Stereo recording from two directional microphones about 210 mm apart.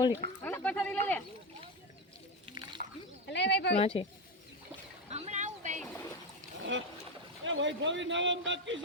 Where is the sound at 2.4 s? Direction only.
20° right (ahead or behind).